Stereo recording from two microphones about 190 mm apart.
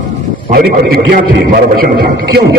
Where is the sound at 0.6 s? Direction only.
55° right (ahead or behind).